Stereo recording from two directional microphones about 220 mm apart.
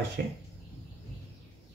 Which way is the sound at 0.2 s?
45° right (ahead or behind).